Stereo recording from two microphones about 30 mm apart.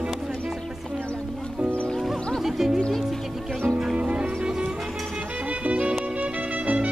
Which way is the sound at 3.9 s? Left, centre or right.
Right.